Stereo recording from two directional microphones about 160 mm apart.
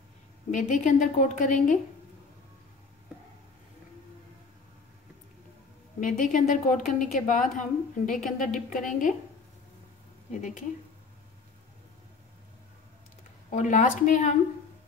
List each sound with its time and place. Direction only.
0.5 s a woman's voice: 50° left (ahead or behind)
5.9 s a woman's voice: 55° left (ahead or behind)
13.5 s a woman's voice: 50° left (ahead or behind)